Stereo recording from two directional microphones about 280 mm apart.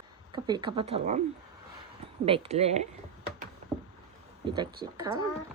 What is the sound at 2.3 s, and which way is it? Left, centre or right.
Speech, right.